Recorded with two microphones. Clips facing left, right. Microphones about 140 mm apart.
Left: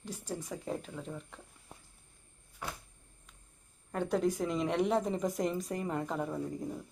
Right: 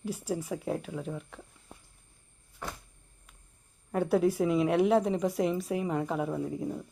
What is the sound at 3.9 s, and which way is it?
A woman's voice, 5° right (ahead or behind).